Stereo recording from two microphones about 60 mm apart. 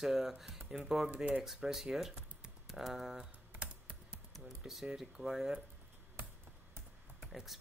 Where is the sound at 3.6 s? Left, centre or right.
Right.